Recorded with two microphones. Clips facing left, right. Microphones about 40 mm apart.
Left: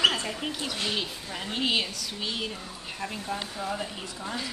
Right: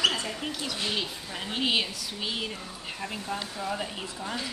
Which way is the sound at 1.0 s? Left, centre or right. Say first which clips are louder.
Even; centre.